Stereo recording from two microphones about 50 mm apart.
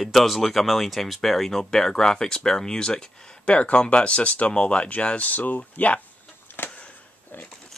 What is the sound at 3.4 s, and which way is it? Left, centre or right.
Speech, left.